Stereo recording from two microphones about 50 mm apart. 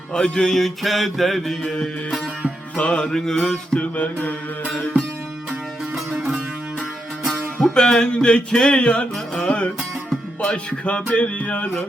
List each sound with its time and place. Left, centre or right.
0.1 s mantra: centre
2.7 s music: left
3.0 s music: centre
3.8 s mantra: left
7.6 s music: centre